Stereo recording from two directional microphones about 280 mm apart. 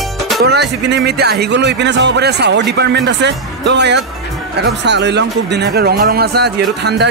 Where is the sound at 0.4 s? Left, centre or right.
Right.